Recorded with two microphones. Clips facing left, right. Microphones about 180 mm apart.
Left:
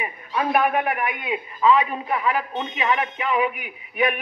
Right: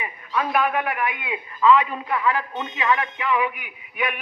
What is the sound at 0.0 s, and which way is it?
A man's voice, 25° left (ahead or behind).